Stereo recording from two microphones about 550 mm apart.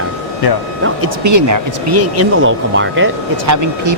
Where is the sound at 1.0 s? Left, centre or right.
Right.